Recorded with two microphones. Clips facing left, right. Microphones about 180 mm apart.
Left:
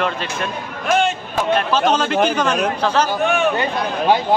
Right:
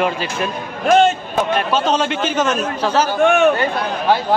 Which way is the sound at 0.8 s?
40° right (ahead or behind).